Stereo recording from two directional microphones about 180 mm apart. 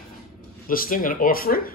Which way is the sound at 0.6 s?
50° left (ahead or behind).